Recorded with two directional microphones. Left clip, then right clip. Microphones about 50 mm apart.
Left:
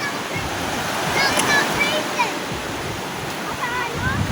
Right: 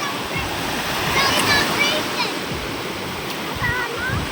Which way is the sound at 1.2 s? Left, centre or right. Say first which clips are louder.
Even; right.